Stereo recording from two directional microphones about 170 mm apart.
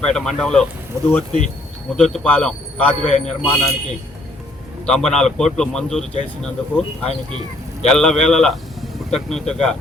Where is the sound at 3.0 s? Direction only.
45° left (ahead or behind).